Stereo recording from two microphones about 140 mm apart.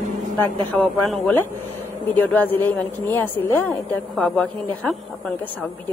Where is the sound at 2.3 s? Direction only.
15° left (ahead or behind).